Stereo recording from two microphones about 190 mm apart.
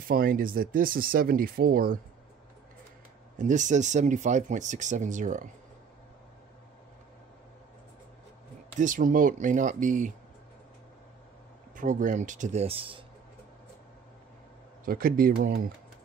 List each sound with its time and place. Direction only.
0.1 s speech: 50° right (ahead or behind)
3.3 s speech: 40° right (ahead or behind)
8.7 s speech: 40° right (ahead or behind)
11.7 s speech: 45° right (ahead or behind)
14.9 s speech: 50° right (ahead or behind)